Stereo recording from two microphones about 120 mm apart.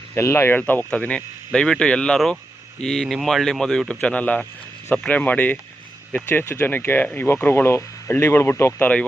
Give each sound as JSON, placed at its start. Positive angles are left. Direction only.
{"t": 0.1, "sound": "speech", "side_deg": 20}